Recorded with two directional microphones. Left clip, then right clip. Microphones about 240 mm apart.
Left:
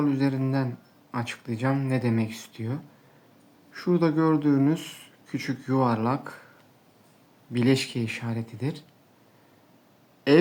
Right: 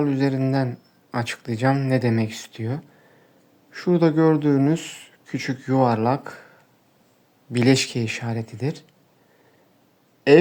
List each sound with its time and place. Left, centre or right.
0.0 s speech: right
7.5 s speech: right
10.3 s speech: right